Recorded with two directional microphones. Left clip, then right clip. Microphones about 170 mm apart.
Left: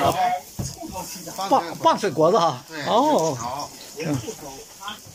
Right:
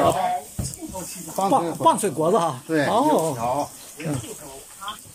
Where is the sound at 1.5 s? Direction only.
5° right (ahead or behind).